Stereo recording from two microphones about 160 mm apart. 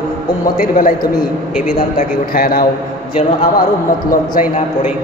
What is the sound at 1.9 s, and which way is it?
Speech, 65° left (ahead or behind).